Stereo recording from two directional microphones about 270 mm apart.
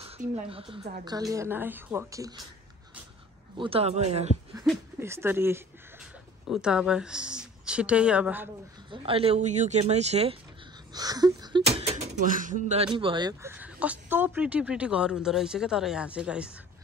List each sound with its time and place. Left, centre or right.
0.0 s a woman's voice: right
3.5 s speech: centre
4.6 s a woman's voice: centre
8.9 s speech: right; by 16.5 s centre